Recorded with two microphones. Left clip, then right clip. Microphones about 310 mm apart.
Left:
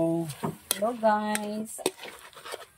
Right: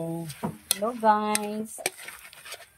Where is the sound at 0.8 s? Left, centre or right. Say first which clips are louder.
Right 2 dB; centre.